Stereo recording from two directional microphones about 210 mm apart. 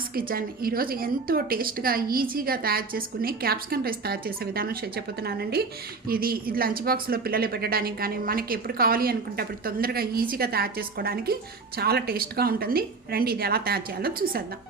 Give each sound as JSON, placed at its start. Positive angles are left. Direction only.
{"t": 0.1, "sound": "a woman's voice", "side_deg": -45}